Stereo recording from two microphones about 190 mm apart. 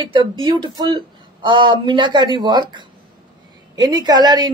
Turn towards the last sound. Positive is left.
turn(degrees=-20)  # may be behind; listen again after turning